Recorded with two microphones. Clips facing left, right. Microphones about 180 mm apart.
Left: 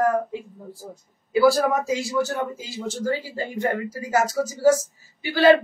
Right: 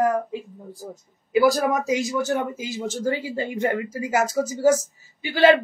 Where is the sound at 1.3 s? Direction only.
20° right (ahead or behind).